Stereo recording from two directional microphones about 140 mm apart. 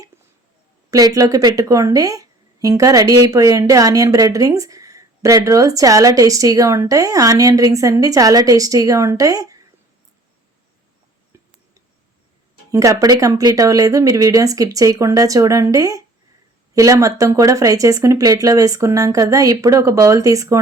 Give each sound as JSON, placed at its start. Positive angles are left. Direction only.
{"t": 0.9, "sound": "a woman's voice", "side_deg": -25}
{"t": 12.7, "sound": "a woman's voice", "side_deg": -25}